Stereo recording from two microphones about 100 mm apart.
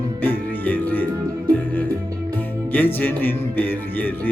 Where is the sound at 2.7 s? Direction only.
20° left (ahead or behind).